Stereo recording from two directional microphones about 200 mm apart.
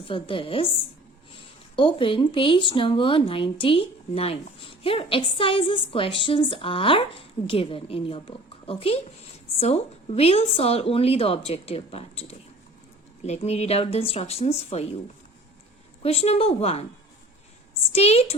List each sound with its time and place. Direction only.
0.0 s a woman's voice: 25° left (ahead or behind)
16.0 s speech: 30° left (ahead or behind)
17.9 s a woman's voice: 30° left (ahead or behind)